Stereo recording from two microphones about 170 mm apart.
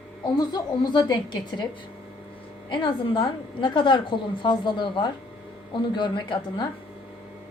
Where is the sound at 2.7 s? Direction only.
30° left (ahead or behind).